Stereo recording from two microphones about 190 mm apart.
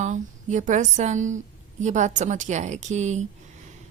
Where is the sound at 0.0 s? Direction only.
40° right (ahead or behind).